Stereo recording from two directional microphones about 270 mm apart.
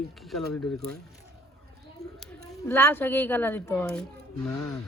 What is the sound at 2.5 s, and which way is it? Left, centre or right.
A woman's voice, centre.